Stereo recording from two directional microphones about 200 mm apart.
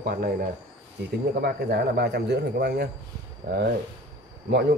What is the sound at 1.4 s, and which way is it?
Speech, 55° right (ahead or behind).